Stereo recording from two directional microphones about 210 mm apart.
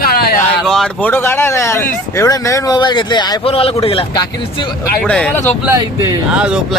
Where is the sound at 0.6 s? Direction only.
Centre (ahead or behind); by 4.3 s 25° left (ahead or behind).